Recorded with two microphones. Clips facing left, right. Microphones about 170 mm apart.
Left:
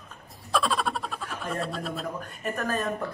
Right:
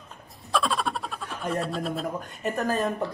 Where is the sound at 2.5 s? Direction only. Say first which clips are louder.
Right 3 dB; 25° right (ahead or behind).